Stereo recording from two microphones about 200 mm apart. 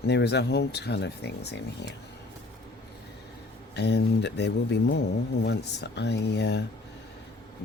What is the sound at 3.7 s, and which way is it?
Speech, 55° left (ahead or behind).